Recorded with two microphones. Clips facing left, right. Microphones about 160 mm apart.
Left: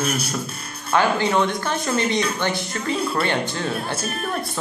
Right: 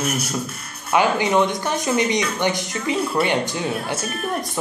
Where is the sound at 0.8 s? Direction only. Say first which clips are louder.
Right 1 dB; 15° right (ahead or behind).